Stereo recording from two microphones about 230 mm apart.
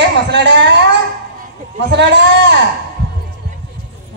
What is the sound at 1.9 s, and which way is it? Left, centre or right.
Speech, right.